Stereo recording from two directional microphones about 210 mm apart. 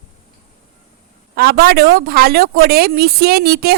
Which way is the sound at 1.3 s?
45° right (ahead or behind).